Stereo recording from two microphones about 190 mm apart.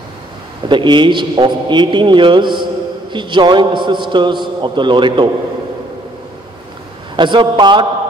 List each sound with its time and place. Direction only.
0.7 s a man's voice: 25° right (ahead or behind)
7.2 s a man's voice: 25° right (ahead or behind)